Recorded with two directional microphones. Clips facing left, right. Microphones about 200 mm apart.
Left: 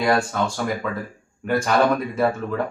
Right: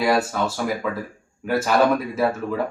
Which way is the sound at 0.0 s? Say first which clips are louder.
Even; 5° right (ahead or behind).